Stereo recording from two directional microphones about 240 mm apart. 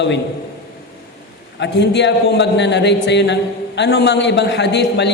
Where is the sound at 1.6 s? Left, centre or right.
Left.